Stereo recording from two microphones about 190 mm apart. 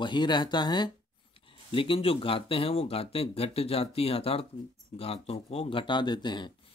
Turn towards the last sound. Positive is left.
turn(degrees=25)  # may be behind; listen again after turning